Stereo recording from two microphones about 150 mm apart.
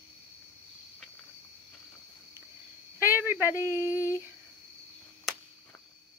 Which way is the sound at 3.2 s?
15° right (ahead or behind).